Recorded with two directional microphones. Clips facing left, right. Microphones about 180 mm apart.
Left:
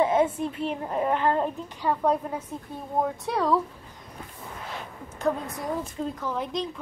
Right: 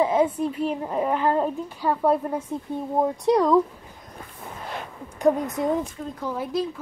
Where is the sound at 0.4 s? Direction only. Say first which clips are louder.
Right 4 dB; 5° right (ahead or behind).